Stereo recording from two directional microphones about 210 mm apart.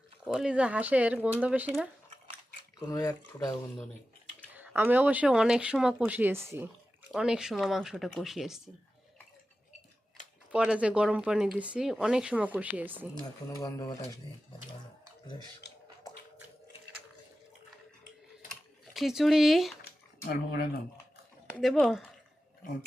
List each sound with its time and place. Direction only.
0.3 s speech: 5° right (ahead or behind)
2.8 s speech: 15° left (ahead or behind)
4.5 s speech: 10° right (ahead or behind)
10.5 s speech: 5° right (ahead or behind)
13.1 s speech: 15° left (ahead or behind)
18.9 s speech: centre (ahead or behind)
20.3 s speech: 50° left (ahead or behind)
21.6 s speech: centre (ahead or behind)